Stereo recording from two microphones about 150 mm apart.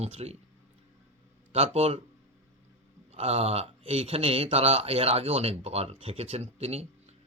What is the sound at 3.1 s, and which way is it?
Speech, 45° right (ahead or behind).